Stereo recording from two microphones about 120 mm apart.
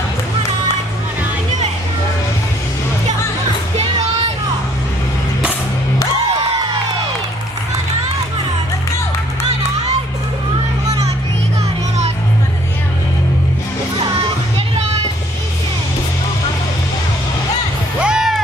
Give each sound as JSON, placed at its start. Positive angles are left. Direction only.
{"t": 18.0, "sound": "music", "side_deg": -5}